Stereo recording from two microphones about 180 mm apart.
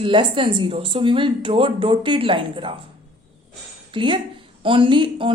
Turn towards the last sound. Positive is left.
turn(degrees=-30)  # may be behind; listen again after turning